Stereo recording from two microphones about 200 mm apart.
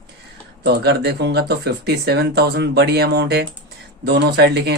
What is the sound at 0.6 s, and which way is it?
Speech, 55° right (ahead or behind).